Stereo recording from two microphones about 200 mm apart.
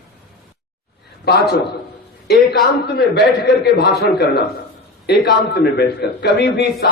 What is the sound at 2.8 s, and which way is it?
A man's voice, 60° left (ahead or behind).